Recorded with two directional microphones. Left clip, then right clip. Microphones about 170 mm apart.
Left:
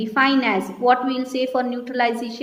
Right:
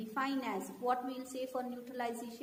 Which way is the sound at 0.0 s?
35° left (ahead or behind).